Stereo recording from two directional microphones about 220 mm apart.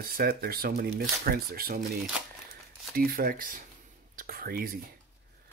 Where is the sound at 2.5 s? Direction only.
40° right (ahead or behind).